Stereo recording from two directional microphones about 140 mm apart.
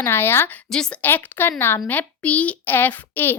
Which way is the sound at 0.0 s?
15° left (ahead or behind).